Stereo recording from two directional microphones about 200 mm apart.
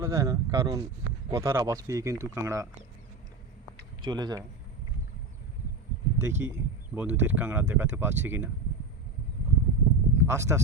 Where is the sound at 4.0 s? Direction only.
20° right (ahead or behind).